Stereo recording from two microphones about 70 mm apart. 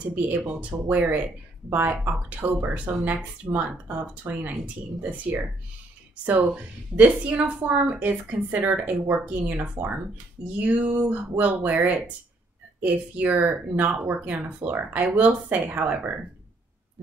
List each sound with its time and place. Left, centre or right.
0.1 s speech: right
2.2 s speech: right